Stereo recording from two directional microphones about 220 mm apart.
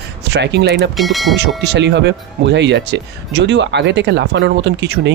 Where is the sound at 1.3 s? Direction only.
50° right (ahead or behind).